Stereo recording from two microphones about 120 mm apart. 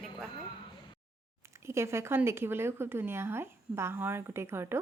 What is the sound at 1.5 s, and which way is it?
A woman's voice, 25° right (ahead or behind).